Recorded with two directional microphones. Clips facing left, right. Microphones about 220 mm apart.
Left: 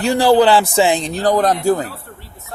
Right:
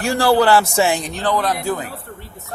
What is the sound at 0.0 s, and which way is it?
A man's voice, 20° left (ahead or behind).